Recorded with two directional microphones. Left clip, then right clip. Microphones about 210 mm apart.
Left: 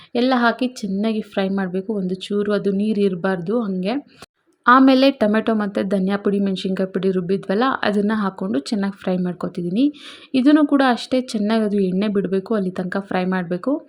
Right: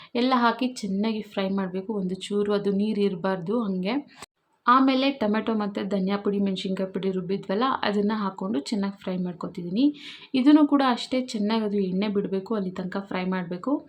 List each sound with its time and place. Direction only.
0.1 s a woman's voice: 20° left (ahead or behind)
4.6 s a woman's voice: 30° left (ahead or behind)